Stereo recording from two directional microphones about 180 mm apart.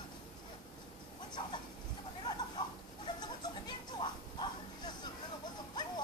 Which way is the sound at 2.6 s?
20° left (ahead or behind).